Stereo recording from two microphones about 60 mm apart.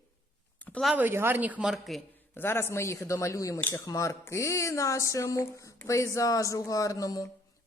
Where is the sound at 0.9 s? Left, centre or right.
Right.